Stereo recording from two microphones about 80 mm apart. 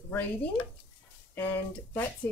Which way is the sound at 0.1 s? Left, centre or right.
Left.